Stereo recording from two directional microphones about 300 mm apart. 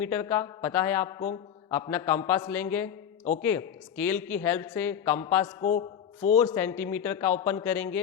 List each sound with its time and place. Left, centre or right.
0.0 s a man's voice: centre